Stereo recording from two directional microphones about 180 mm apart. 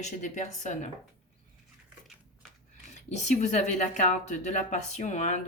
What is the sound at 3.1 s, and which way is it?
Speech, 40° left (ahead or behind).